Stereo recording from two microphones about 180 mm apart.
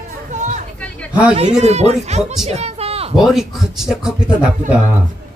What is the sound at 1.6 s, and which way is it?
Speech, 35° right (ahead or behind).